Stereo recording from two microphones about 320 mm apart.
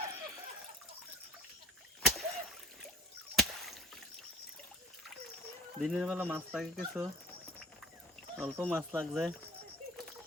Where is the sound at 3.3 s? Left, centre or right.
Centre.